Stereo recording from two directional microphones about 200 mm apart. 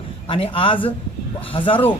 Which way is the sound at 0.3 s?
25° left (ahead or behind).